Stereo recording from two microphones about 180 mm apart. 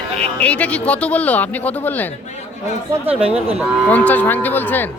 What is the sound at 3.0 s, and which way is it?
Speech, 35° right (ahead or behind).